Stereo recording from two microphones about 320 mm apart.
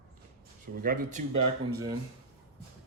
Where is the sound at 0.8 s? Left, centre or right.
Right.